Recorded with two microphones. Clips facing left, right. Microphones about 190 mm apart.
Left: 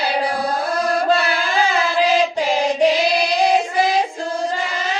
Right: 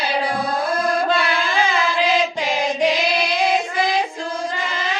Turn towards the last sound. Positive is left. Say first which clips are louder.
# left 3 dB
turn(degrees=35)  # may be behind; listen again after turning